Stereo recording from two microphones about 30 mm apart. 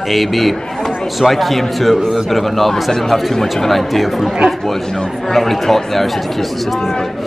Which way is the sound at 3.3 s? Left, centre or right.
Centre.